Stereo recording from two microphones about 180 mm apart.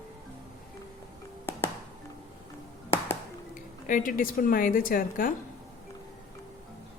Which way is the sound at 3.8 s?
50° left (ahead or behind).